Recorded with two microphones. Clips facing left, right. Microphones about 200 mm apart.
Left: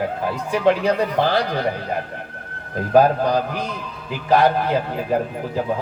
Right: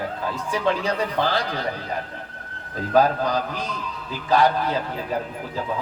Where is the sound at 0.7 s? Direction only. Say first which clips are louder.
Left 6 dB; 55° left (ahead or behind).